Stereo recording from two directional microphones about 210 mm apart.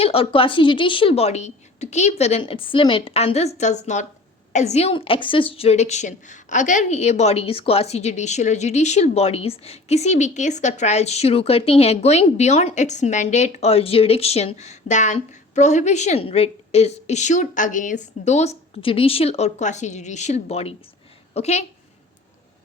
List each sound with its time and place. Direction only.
0.0 s a woman's voice: 25° left (ahead or behind)